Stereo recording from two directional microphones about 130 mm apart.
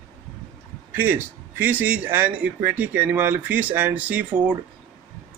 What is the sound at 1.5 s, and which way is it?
Speech, 15° right (ahead or behind).